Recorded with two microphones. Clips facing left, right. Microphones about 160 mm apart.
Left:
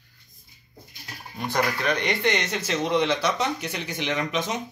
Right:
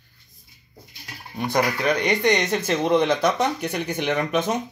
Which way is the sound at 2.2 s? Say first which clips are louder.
Right 5 dB; 50° right (ahead or behind).